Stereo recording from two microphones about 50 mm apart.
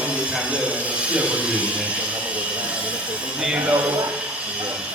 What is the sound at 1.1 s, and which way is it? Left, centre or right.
Speech, right.